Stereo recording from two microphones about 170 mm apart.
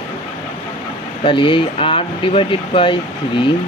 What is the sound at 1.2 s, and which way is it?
Speech, 30° left (ahead or behind).